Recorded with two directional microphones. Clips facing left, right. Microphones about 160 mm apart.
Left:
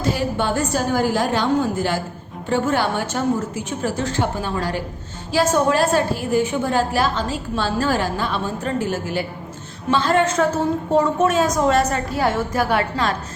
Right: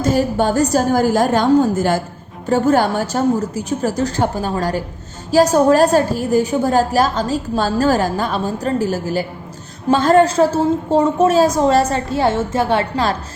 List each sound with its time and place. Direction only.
0.0 s a woman's voice: 45° right (ahead or behind)